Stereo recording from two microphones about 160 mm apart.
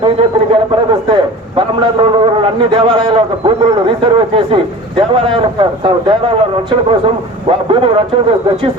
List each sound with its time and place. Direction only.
0.0 s a man's voice: 35° right (ahead or behind)